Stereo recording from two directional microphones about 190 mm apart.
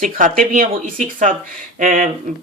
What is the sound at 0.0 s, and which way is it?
Speech, 45° right (ahead or behind).